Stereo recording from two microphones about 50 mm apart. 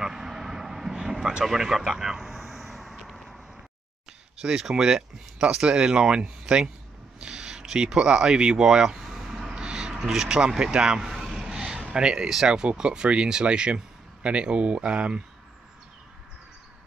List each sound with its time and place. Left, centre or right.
0.0 s vehicle: centre
4.4 s speech: centre
9.6 s a sound: centre
11.9 s speech: centre